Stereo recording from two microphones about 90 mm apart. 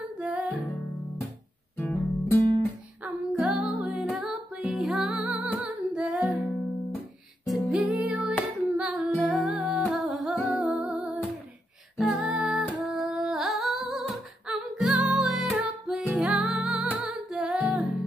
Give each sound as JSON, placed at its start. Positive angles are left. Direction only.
{"t": 0.2, "sound": "music", "side_deg": -10}
{"t": 1.8, "sound": "music", "side_deg": 25}
{"t": 3.3, "sound": "music", "side_deg": -10}
{"t": 5.1, "sound": "music", "side_deg": -15}
{"t": 7.4, "sound": "music", "side_deg": 0}
{"t": 7.9, "sound": "music", "side_deg": -15}
{"t": 10.5, "sound": "music", "side_deg": -15}
{"t": 12.0, "sound": "music", "side_deg": -5}
{"t": 12.9, "sound": "singing", "side_deg": -5}
{"t": 14.6, "sound": "music", "side_deg": -10}